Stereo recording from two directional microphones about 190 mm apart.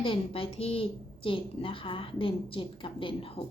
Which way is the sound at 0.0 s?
30° left (ahead or behind).